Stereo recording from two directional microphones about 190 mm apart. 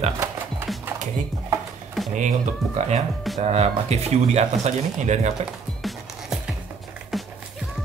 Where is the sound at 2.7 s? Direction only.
35° right (ahead or behind).